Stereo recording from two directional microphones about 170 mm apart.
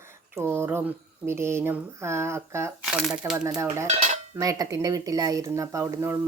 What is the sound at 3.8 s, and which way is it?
Cutlery, 45° right (ahead or behind).